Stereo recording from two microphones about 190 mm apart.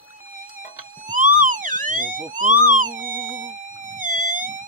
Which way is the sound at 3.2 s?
40° right (ahead or behind).